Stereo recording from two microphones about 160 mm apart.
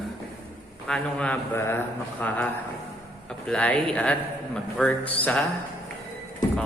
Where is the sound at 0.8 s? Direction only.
5° left (ahead or behind).